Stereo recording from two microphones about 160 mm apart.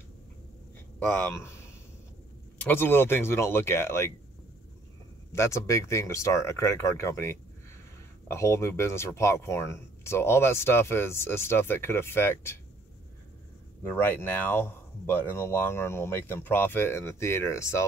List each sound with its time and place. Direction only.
0.9 s speech: 10° left (ahead or behind)
2.6 s speech: 15° left (ahead or behind)
5.3 s speech: 15° left (ahead or behind)
13.9 s speech: 15° left (ahead or behind)